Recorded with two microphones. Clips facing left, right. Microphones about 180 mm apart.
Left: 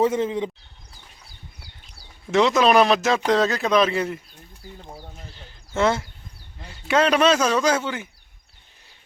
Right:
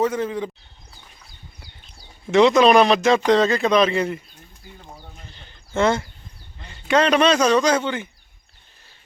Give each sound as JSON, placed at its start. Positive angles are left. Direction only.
{"t": 0.0, "sound": "speech", "side_deg": 25}
{"t": 2.3, "sound": "speech", "side_deg": 0}
{"t": 5.1, "sound": "a sound", "side_deg": 5}
{"t": 6.6, "sound": "speech", "side_deg": 5}